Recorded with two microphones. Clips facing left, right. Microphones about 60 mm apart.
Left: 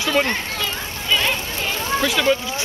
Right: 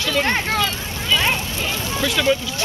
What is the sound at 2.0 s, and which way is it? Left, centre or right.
Speech, centre.